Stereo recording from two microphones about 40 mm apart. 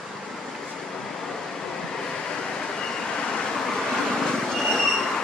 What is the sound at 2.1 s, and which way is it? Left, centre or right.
Vehicle, left.